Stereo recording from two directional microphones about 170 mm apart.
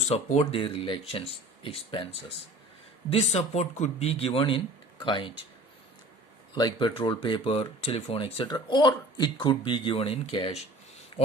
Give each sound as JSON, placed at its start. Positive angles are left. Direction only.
{"t": 0.1, "sound": "speech", "side_deg": 40}
{"t": 3.1, "sound": "speech", "side_deg": 40}
{"t": 6.5, "sound": "speech", "side_deg": 25}